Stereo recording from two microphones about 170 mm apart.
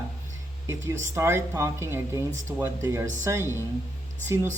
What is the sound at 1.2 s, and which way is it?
A woman's voice, 15° right (ahead or behind).